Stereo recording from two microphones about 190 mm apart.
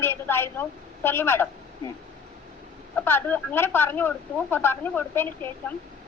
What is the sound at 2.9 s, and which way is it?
A woman's voice, 10° left (ahead or behind).